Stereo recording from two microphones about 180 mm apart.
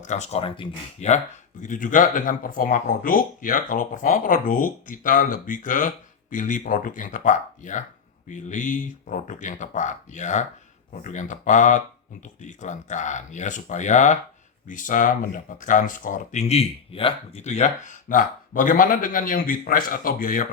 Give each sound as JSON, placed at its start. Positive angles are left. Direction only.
{"t": 0.0, "sound": "speech", "side_deg": 40}